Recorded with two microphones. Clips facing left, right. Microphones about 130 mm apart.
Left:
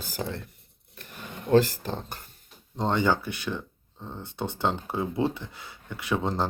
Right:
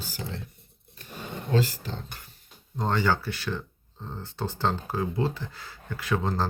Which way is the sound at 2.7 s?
20° left (ahead or behind).